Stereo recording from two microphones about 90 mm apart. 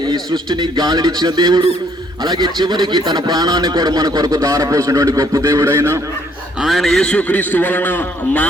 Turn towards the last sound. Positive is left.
turn(degrees=20)  # may be behind; listen again after turning